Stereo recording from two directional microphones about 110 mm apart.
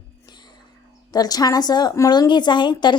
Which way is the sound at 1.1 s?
35° left (ahead or behind).